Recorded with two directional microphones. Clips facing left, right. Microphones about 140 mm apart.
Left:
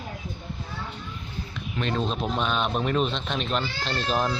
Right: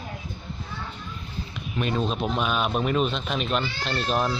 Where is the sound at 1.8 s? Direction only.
5° right (ahead or behind).